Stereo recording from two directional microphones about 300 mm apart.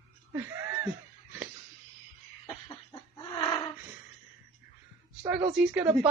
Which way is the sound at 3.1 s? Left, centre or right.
Centre.